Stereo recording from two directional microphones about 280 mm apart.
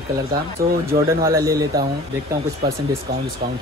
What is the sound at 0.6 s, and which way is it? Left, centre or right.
Speech, right.